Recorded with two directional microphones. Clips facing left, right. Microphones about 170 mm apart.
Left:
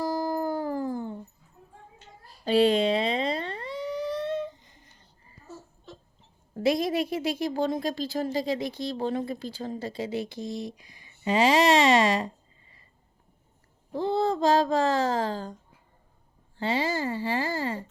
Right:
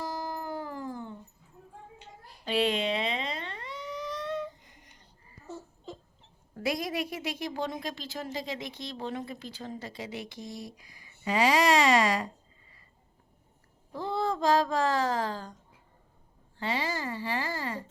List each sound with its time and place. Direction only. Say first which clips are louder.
0.0 s howl: left 8 dB; 35° left (ahead or behind)
2.4 s a sound: left 7 dB; 35° left (ahead or behind)
6.5 s a woman's voice: left 7 dB; 25° left (ahead or behind)
13.9 s speech: left 5 dB; 25° left (ahead or behind)
16.6 s speech: left 5 dB; 30° left (ahead or behind)